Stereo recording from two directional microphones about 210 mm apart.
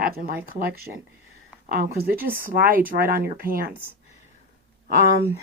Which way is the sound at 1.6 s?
45° right (ahead or behind).